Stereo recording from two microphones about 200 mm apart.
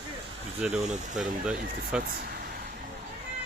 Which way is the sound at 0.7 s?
35° right (ahead or behind).